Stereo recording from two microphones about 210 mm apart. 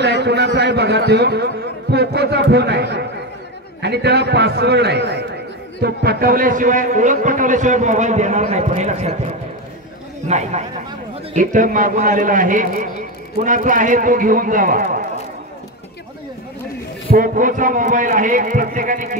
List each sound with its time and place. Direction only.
0.0 s a man's voice: 55° right (ahead or behind)
17.1 s a man's voice: 40° right (ahead or behind)